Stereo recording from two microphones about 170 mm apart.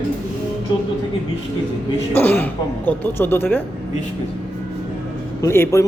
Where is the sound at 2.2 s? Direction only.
10° left (ahead or behind).